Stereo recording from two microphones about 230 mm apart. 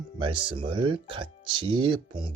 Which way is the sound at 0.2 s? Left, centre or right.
Right.